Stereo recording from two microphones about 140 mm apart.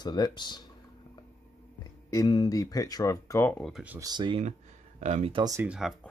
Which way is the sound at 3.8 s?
25° right (ahead or behind).